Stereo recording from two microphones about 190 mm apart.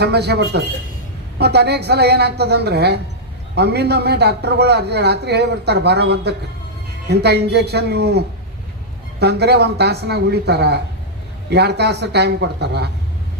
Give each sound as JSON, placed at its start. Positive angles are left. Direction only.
{"t": 0.0, "sound": "a man's voice", "side_deg": -60}
{"t": 9.2, "sound": "a man's voice", "side_deg": -60}